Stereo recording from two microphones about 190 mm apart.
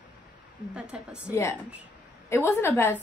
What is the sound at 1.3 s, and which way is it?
A woman's voice, 15° left (ahead or behind).